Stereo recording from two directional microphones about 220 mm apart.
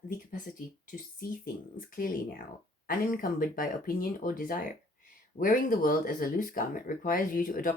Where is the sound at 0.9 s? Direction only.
40° left (ahead or behind).